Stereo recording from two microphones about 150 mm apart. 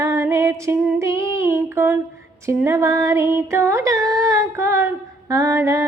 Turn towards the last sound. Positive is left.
turn(degrees=-20)  # may be behind; listen again after turning